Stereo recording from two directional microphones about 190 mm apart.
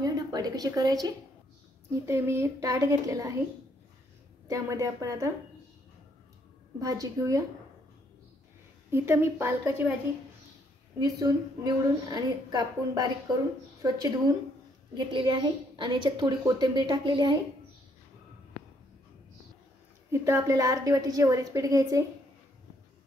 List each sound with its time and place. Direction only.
0.0 s a sound: 20° right (ahead or behind)
2.0 s a woman's voice: 15° right (ahead or behind)
4.5 s a woman's voice: 15° right (ahead or behind)
6.8 s a woman's voice: 20° right (ahead or behind)
8.9 s a woman's voice: 15° right (ahead or behind)
11.0 s a woman's voice: 20° right (ahead or behind)
20.1 s a woman's voice: 15° right (ahead or behind)